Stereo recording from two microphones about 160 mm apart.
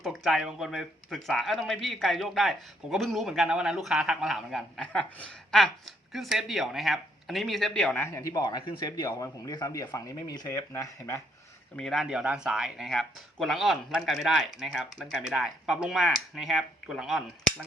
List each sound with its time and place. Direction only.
0.0 s speech: centre (ahead or behind)
8.0 s speech: 20° left (ahead or behind)
11.8 s speech: centre (ahead or behind)